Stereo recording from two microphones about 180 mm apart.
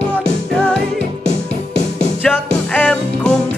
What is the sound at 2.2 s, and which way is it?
Music, 5° left (ahead or behind).